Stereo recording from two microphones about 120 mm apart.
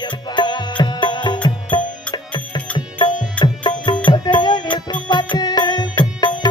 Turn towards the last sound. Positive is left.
turn(degrees=35)  # may be behind; listen again after turning